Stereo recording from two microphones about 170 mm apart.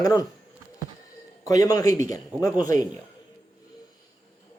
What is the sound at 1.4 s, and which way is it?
A man's voice, 20° left (ahead or behind).